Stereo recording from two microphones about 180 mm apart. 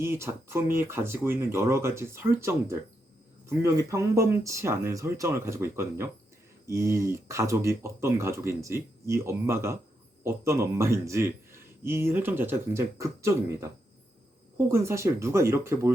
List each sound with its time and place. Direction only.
0.0 s a man's voice: 15° right (ahead or behind)
14.7 s a man's voice: 15° right (ahead or behind)